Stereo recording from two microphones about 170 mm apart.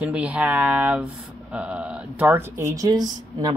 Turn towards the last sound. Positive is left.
turn(degrees=-25)  # may be behind; listen again after turning